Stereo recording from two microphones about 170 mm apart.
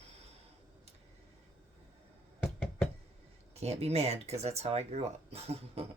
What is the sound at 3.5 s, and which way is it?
Speech, 40° right (ahead or behind).